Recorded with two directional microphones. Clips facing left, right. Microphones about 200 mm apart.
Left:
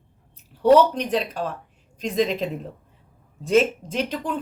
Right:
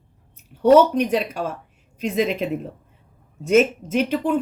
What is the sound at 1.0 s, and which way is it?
A woman's voice, 10° right (ahead or behind).